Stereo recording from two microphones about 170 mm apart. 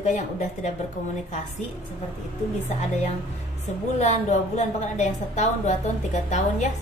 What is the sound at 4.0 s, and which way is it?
Speech, 40° left (ahead or behind).